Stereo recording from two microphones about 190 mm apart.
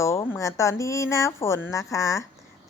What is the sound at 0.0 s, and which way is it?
A woman's voice, 15° left (ahead or behind).